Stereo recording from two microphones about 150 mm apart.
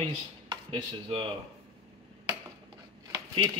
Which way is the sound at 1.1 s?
35° right (ahead or behind).